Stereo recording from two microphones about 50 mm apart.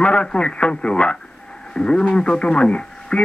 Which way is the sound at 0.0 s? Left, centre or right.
Left.